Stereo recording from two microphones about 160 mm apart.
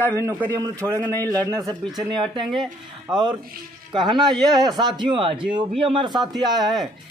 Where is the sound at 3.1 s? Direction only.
25° right (ahead or behind).